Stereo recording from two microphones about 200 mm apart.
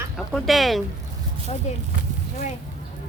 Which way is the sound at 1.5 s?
30° left (ahead or behind).